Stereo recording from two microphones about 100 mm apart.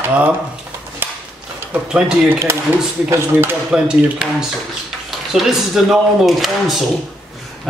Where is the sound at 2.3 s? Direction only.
25° right (ahead or behind).